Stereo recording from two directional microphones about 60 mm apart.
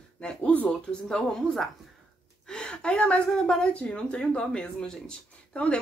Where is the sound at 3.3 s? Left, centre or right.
Centre.